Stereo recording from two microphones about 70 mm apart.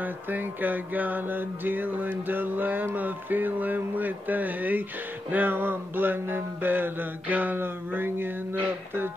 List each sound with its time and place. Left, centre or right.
0.0 s mantra: right